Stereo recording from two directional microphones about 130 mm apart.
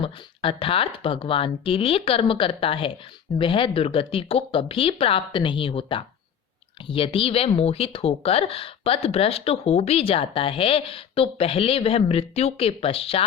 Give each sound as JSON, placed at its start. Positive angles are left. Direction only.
{"t": 0.0, "sound": "speech", "side_deg": 45}